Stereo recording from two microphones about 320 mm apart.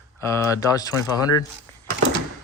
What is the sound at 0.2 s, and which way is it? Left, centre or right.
Speech, centre.